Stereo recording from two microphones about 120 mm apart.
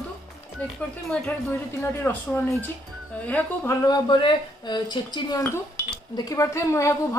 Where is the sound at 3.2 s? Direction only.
10° left (ahead or behind).